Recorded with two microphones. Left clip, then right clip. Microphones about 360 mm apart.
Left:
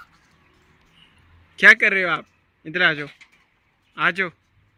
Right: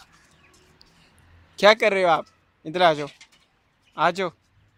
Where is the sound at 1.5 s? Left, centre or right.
Centre.